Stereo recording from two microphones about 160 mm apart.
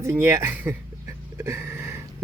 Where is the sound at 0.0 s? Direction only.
15° right (ahead or behind).